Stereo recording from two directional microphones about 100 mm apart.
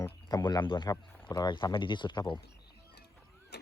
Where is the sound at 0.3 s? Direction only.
40° left (ahead or behind).